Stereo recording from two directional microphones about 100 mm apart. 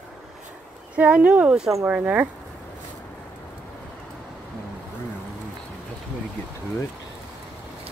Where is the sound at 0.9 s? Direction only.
15° right (ahead or behind).